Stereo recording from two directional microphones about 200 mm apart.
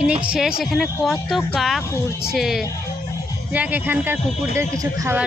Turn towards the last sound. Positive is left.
turn(degrees=-15)  # may be behind; listen again after turning